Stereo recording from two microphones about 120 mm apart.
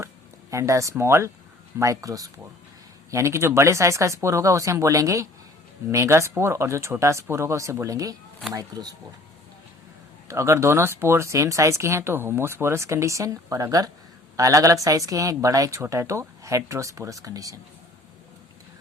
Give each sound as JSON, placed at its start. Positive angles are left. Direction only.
{"t": 0.5, "sound": "speech", "side_deg": -25}
{"t": 10.2, "sound": "speech", "side_deg": -25}